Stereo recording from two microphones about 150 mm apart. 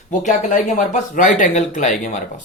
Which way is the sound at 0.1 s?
55° left (ahead or behind).